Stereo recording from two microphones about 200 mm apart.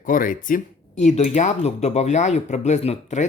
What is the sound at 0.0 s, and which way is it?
Speech, 45° left (ahead or behind).